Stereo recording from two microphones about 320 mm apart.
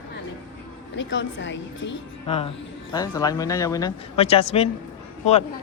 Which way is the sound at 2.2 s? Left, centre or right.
Centre.